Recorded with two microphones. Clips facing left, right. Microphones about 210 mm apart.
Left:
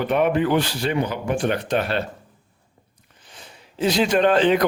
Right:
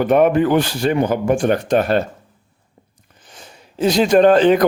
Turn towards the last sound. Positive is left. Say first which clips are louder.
# right 6 dB
turn(degrees=-45)  # may be behind; listen again after turning